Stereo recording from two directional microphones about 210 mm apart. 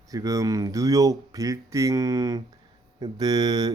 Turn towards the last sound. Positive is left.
turn(degrees=-20)  # may be behind; listen again after turning